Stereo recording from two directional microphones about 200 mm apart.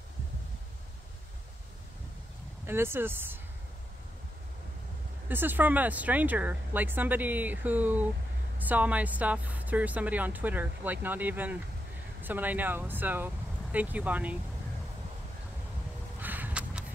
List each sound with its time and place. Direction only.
2.6 s speech: 10° right (ahead or behind)
5.3 s speech: 10° right (ahead or behind)
16.2 s a sound: 10° right (ahead or behind)